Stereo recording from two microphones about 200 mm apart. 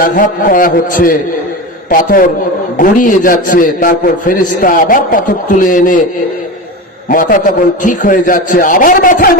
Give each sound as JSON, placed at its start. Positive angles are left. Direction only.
{"t": 0.0, "sound": "a man's voice", "side_deg": 45}
{"t": 7.1, "sound": "a man's voice", "side_deg": 45}